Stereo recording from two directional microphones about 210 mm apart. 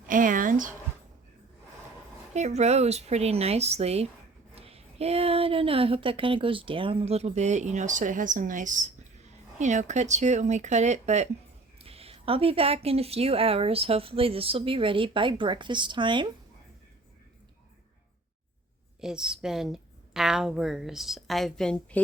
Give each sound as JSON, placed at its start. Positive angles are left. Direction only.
{"t": 0.1, "sound": "a sound", "side_deg": -40}
{"t": 2.3, "sound": "a woman's voice", "side_deg": -30}
{"t": 18.9, "sound": "a woman's voice", "side_deg": -5}